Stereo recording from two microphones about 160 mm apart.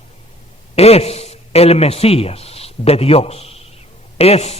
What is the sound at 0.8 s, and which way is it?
A man's voice, 40° left (ahead or behind).